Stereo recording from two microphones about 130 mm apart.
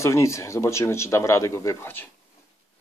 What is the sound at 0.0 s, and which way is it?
Speech, 20° left (ahead or behind).